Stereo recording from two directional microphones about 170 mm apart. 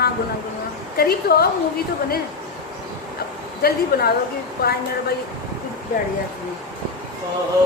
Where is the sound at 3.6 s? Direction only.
65° left (ahead or behind).